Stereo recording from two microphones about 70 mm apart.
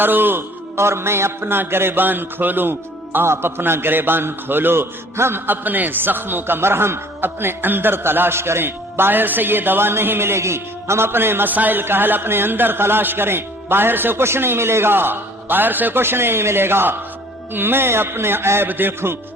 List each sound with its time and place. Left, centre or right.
0.0 s a man's voice: right